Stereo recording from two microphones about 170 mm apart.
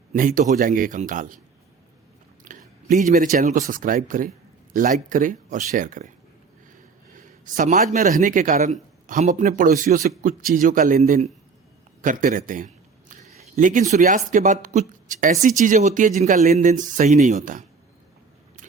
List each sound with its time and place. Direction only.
0.1 s speech: 50° right (ahead or behind)
2.4 s speech: 50° right (ahead or behind)
7.1 s a man's voice: 50° right (ahead or behind)
12.0 s a sound: 50° right (ahead or behind)
13.9 s speech: 45° right (ahead or behind)